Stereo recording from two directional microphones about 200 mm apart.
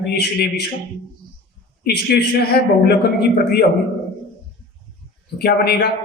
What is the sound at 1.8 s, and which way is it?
Speech, 55° left (ahead or behind).